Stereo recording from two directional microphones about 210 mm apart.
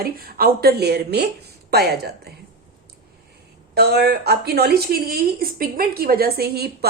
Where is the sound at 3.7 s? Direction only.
50° right (ahead or behind).